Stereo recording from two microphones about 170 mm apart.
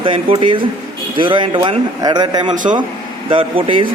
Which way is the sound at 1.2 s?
30° right (ahead or behind).